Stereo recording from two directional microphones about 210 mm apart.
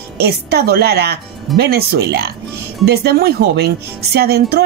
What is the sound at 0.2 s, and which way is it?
Speech, 50° right (ahead or behind).